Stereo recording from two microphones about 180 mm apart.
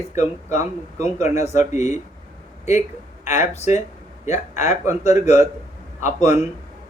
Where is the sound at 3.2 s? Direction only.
15° right (ahead or behind).